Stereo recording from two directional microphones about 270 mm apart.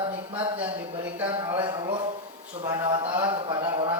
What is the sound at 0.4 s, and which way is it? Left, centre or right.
Speech, centre.